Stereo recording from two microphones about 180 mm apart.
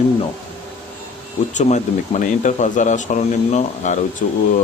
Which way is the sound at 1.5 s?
40° left (ahead or behind).